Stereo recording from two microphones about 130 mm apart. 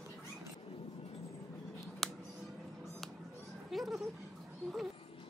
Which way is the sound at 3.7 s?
Centre (ahead or behind).